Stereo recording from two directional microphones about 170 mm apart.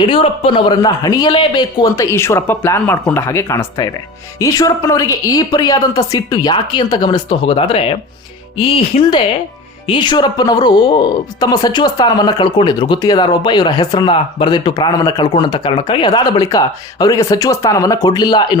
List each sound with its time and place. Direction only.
0.0 s speech: 30° left (ahead or behind)